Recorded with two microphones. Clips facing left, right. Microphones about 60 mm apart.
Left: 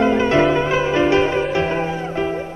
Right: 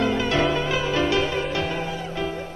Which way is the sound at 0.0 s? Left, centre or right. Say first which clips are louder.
Left 6 dB; left.